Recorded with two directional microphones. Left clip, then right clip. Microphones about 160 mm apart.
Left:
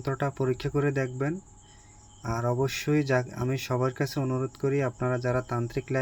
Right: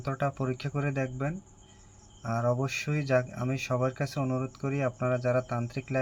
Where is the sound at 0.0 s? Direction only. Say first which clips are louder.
Left 2 dB; 25° left (ahead or behind).